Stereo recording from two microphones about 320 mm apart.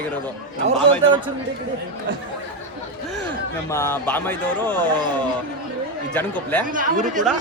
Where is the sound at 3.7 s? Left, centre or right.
Centre.